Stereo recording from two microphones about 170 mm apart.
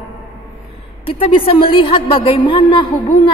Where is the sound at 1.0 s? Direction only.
30° left (ahead or behind).